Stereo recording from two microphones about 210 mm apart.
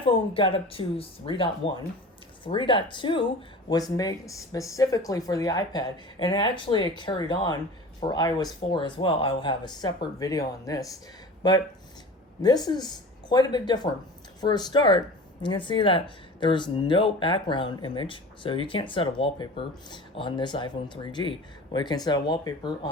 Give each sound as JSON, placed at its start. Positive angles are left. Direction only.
{"t": 0.0, "sound": "a woman's voice", "side_deg": 25}